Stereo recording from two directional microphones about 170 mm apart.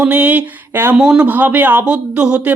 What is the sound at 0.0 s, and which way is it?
Speech, 10° right (ahead or behind).